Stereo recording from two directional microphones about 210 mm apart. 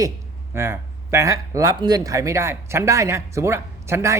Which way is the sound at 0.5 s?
10° right (ahead or behind).